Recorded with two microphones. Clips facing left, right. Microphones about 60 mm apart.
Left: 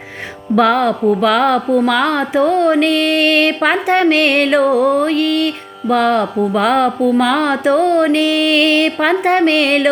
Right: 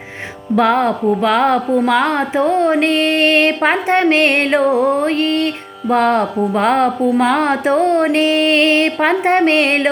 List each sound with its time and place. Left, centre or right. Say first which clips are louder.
0.5 s speech: left 1 dB; centre
2.8 s speech: even; right
4.7 s music: left 2 dB; centre
5.0 s music: left 1 dB; right
6.0 s music: even; right
6.6 s speech: even; right
8.1 s music: even; right
9.0 s speech: even; centre